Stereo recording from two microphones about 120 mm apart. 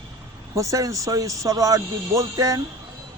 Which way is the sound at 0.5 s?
25° right (ahead or behind).